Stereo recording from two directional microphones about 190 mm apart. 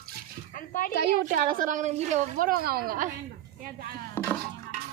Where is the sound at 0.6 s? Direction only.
45° left (ahead or behind).